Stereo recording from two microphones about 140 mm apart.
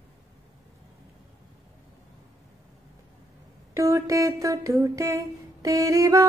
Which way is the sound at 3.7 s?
20° right (ahead or behind).